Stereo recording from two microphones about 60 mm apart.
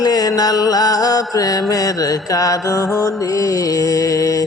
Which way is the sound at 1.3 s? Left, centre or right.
Left.